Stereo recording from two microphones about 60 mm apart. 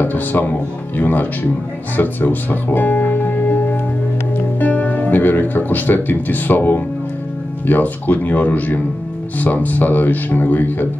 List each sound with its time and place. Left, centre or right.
0.0 s speech: left
2.0 s music: left
4.6 s speech: left